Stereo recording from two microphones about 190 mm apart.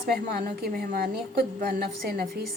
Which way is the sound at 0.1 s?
55° right (ahead or behind).